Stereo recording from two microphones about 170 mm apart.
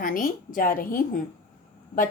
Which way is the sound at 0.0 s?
55° left (ahead or behind).